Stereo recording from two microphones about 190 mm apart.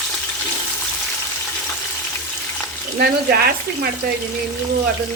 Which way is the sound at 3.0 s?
55° right (ahead or behind).